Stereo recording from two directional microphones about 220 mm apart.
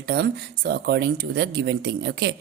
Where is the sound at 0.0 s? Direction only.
50° right (ahead or behind).